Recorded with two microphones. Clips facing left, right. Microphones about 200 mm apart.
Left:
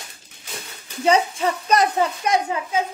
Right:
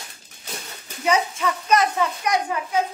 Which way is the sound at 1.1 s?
30° left (ahead or behind).